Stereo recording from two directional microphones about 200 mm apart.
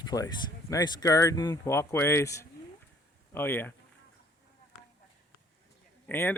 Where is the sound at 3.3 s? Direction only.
10° left (ahead or behind).